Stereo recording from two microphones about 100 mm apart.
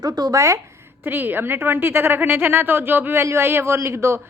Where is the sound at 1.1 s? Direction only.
20° right (ahead or behind).